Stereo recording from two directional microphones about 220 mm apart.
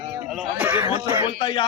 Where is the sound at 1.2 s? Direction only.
20° left (ahead or behind).